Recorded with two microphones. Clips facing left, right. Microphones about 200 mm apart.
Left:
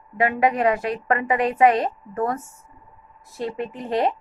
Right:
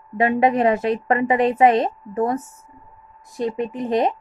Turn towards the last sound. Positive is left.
turn(degrees=-20)  # may be behind; listen again after turning